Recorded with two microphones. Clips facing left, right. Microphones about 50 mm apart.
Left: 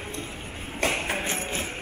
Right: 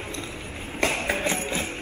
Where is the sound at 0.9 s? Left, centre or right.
Centre.